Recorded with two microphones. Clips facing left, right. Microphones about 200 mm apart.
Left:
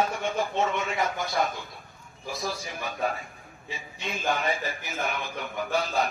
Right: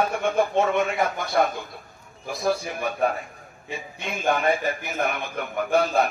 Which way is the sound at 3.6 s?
55° right (ahead or behind).